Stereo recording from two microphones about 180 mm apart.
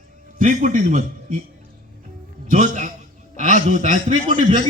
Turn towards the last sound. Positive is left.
turn(degrees=-40)  # may be behind; listen again after turning